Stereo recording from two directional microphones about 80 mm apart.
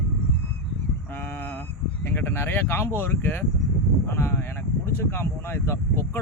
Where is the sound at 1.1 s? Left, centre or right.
Left.